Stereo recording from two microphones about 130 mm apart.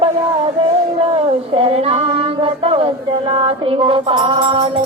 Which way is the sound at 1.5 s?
45° right (ahead or behind).